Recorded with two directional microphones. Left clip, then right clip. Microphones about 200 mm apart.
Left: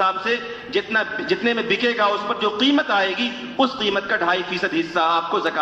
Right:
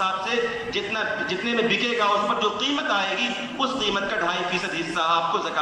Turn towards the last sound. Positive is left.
turn(degrees=40)  # may be behind; listen again after turning